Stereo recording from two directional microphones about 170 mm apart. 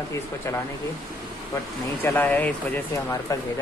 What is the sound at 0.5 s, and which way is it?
Speech, 15° left (ahead or behind).